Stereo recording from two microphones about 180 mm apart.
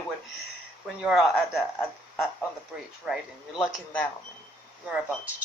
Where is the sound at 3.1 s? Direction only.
5° right (ahead or behind).